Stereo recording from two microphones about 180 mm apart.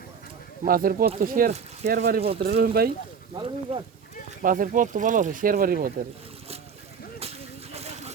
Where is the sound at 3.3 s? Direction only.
25° right (ahead or behind).